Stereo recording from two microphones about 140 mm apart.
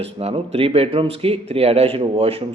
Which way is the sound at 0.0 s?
45° right (ahead or behind).